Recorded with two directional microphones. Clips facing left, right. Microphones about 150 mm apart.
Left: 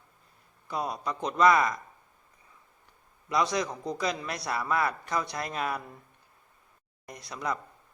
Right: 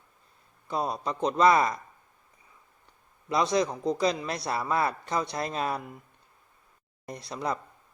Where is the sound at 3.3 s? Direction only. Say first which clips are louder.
Right 3 dB; 25° right (ahead or behind).